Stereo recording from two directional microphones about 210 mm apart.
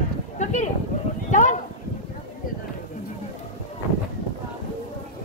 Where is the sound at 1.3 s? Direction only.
35° left (ahead or behind).